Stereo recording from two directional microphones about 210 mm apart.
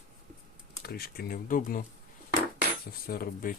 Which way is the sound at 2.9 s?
45° left (ahead or behind).